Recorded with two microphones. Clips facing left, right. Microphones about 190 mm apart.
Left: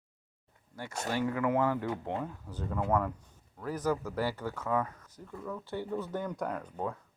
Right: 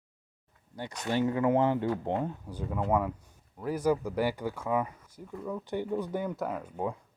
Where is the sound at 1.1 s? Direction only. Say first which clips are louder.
Right 4 dB; 25° right (ahead or behind).